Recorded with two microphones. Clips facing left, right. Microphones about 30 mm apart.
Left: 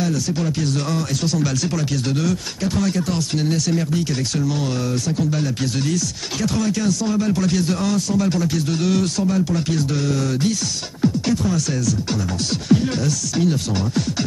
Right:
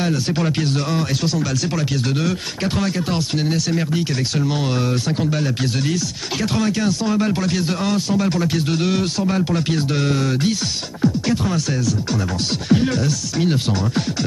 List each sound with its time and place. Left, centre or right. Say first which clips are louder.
0.3 s speech: right 2 dB; right
0.6 s speech: right 1 dB; right
1.4 s speech: left 1 dB; centre
1.7 s speech: right 1 dB; centre
5.3 s speech: right 1 dB; right